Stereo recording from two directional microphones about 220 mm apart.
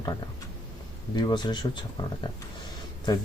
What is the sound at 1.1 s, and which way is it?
Speech, 20° left (ahead or behind).